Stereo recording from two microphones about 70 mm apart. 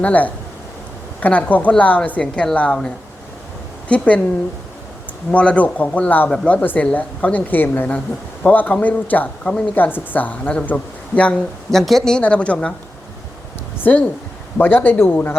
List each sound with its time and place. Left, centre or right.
0.0 s a woman's voice: left
5.3 s a woman's voice: centre
11.7 s speech: centre
13.8 s a woman's voice: left